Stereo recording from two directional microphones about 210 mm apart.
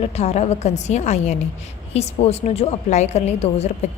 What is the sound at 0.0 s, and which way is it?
A woman's voice, 30° left (ahead or behind).